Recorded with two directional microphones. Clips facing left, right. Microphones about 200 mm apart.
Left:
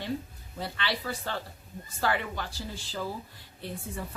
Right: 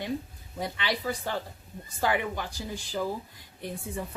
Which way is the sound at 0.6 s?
15° right (ahead or behind).